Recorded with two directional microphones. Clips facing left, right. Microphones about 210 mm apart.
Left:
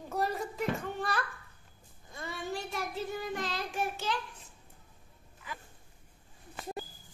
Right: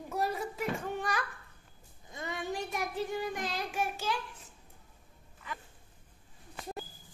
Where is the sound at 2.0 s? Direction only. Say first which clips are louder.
Right 1 dB; 20° right (ahead or behind).